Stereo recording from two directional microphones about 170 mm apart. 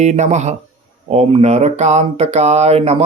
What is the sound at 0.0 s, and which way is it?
Speech, 40° right (ahead or behind).